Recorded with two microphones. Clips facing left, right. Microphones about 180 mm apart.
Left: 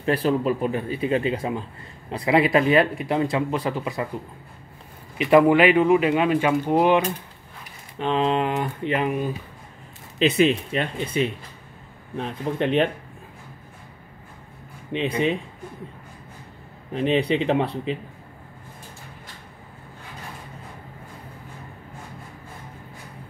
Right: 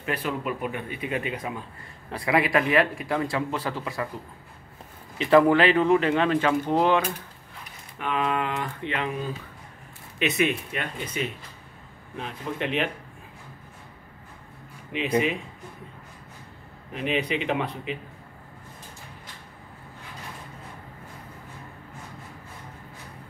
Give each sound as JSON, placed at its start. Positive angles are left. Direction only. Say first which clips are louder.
{"t": 0.0, "sound": "speech", "louder": "left 8 dB", "side_deg": 35}
{"t": 5.1, "sound": "speech", "louder": "left 2 dB", "side_deg": 15}
{"t": 8.0, "sound": "speech", "louder": "left 5 dB", "side_deg": 30}
{"t": 10.1, "sound": "speech", "louder": "left 6 dB", "side_deg": 30}
{"t": 14.9, "sound": "speech", "louder": "left 1 dB", "side_deg": 30}
{"t": 16.9, "sound": "speech", "louder": "left 6 dB", "side_deg": 35}